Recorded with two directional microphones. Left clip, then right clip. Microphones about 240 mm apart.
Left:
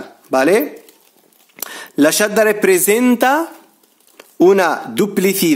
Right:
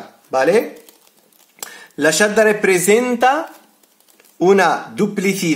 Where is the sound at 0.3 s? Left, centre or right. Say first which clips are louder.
Left 1 dB; left.